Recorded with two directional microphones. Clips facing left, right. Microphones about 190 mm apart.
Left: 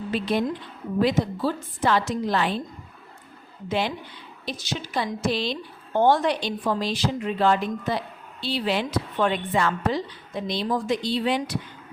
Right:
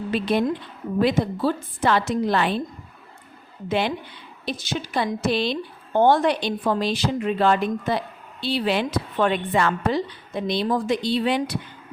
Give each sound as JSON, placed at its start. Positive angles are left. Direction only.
{"t": 0.1, "sound": "a woman's voice", "side_deg": -65}
{"t": 3.7, "sound": "a woman's voice", "side_deg": -60}